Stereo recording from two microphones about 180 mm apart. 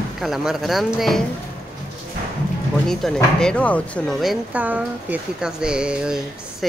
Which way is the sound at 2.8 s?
5° left (ahead or behind).